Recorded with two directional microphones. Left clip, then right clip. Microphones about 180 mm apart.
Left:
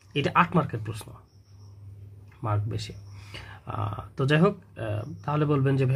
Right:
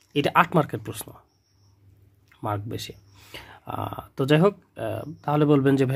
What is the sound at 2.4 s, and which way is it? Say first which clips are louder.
Speech: right 3 dB; 45° right (ahead or behind).